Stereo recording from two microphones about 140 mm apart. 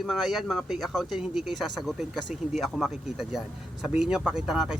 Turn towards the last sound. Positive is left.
turn(degrees=-5)  # may be behind; listen again after turning